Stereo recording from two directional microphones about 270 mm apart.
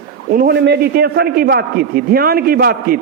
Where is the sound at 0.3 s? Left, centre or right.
Right.